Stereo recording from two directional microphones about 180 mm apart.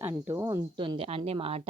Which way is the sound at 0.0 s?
15° right (ahead or behind).